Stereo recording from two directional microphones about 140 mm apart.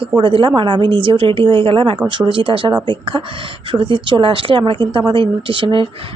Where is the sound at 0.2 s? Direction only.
35° right (ahead or behind).